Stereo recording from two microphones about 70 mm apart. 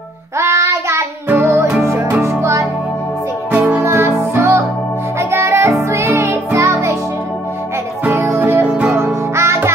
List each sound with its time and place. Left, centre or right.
0.4 s music: right
2.2 s music: right
3.8 s music: right
8.2 s music: right